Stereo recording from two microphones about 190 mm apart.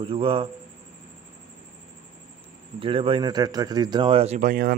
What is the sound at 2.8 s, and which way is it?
Speech, 30° right (ahead or behind).